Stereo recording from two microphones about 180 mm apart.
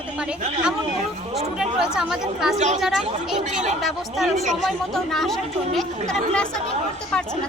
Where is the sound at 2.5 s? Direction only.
40° right (ahead or behind).